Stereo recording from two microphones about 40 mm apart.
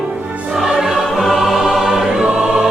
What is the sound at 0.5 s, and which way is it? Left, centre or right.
Music, centre.